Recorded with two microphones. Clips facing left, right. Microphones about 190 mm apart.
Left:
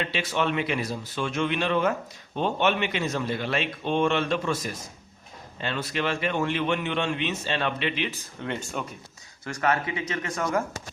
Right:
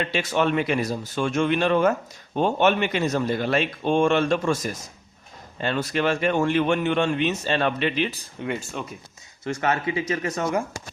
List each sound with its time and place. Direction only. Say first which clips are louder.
0.1 s speech: right 4 dB; 45° right (ahead or behind)
8.8 s speech: even; 5° left (ahead or behind)
9.4 s speech: right 2 dB; 25° right (ahead or behind)